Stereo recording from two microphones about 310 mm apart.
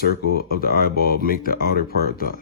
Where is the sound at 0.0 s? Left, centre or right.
Left.